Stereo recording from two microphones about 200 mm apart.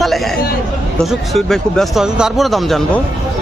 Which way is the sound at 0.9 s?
Centre (ahead or behind).